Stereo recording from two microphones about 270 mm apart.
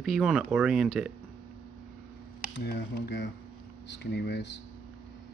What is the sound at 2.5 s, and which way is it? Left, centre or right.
Speech, left.